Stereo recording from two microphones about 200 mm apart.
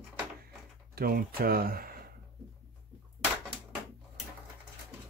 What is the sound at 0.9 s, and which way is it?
Speech, 50° right (ahead or behind).